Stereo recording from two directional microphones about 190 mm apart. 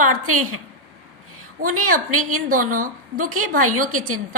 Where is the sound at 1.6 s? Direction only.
45° right (ahead or behind).